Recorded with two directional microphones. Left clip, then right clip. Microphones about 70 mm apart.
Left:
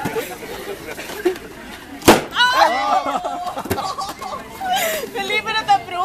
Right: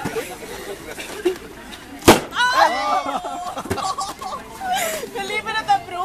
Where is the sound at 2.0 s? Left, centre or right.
Centre.